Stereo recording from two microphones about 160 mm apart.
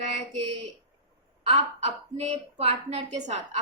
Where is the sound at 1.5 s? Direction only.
40° right (ahead or behind).